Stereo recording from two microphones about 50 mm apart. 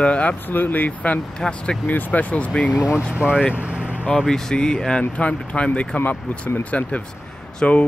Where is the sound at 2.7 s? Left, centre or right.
Right.